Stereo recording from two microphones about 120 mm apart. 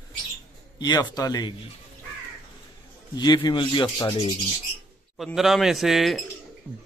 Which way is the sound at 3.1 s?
40° left (ahead or behind).